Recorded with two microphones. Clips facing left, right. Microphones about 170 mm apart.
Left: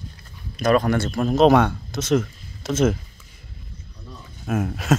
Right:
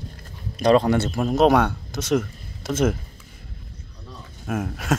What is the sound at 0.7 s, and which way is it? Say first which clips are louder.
Speech: right 2 dB; 25° right (ahead or behind).